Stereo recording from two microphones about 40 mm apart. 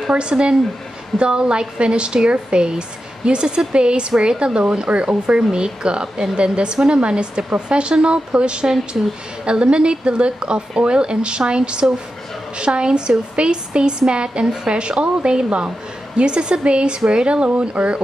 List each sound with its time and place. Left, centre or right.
0.1 s a woman's voice: right